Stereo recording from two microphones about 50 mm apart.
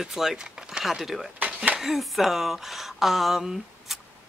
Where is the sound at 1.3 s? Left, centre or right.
Right.